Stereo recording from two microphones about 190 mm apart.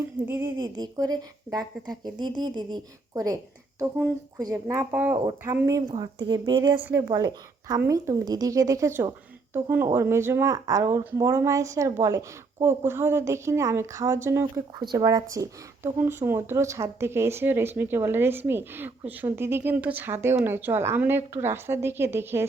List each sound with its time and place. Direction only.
0.3 s speech: 10° right (ahead or behind)
0.5 s speech: 20° right (ahead or behind)
5.1 s speech: 25° right (ahead or behind)